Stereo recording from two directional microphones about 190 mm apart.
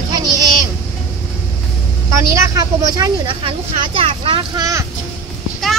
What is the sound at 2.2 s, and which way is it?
Speech, 15° right (ahead or behind).